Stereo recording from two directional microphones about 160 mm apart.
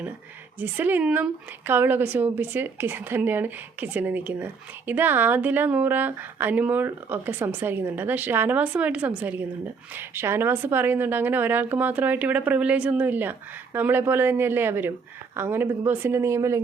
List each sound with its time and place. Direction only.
0.6 s a woman's voice: 10° right (ahead or behind)